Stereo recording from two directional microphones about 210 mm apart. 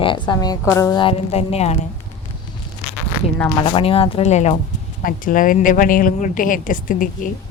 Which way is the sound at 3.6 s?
25° left (ahead or behind).